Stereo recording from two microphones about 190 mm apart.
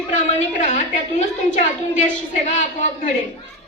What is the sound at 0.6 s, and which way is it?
A woman's voice, 40° left (ahead or behind).